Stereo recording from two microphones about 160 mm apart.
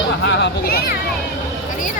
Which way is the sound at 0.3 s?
90° left.